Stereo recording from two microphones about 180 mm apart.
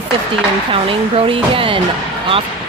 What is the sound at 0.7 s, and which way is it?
Speech, 30° right (ahead or behind).